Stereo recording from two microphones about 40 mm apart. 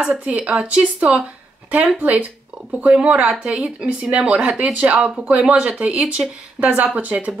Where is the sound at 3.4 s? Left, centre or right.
Right.